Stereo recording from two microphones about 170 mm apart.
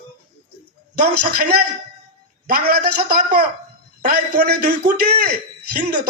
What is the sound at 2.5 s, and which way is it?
A man's voice, 60° right (ahead or behind).